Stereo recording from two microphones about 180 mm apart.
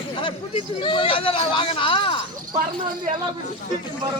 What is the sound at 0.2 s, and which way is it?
A man's voice, 30° left (ahead or behind).